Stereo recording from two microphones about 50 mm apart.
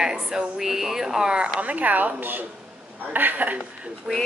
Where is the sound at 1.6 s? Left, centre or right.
Right.